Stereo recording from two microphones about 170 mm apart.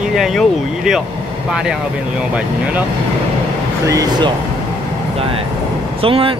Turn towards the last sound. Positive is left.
turn(degrees=-35)  # may be behind; listen again after turning